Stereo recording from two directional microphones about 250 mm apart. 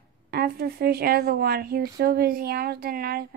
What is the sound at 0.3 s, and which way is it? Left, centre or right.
A woman's voice, right.